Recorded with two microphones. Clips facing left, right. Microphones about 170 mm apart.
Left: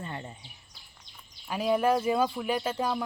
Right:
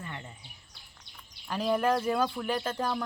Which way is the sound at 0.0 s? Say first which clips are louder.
Left 4 dB; 30° left (ahead or behind).